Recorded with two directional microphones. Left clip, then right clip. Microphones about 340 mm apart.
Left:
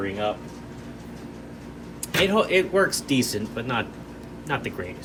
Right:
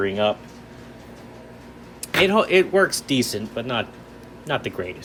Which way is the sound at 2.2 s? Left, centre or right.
Centre.